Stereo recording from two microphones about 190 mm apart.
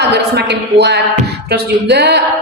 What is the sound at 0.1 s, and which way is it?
A woman's voice, 60° right (ahead or behind).